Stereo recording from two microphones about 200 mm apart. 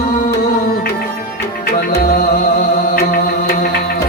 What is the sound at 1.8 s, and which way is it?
Music, 45° left (ahead or behind).